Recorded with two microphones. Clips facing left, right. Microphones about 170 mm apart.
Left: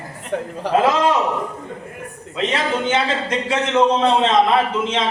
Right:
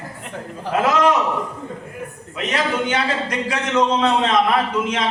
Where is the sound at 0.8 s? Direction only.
25° left (ahead or behind).